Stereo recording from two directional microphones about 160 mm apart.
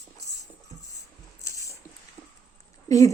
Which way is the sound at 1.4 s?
20° left (ahead or behind).